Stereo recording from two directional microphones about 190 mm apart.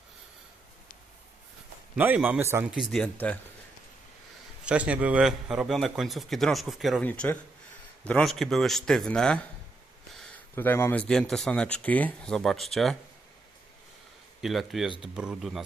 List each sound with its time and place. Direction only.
2.0 s a man's voice: 10° right (ahead or behind)
2.7 s speech: centre (ahead or behind)
4.6 s speech: 5° right (ahead or behind)
14.4 s speech: centre (ahead or behind)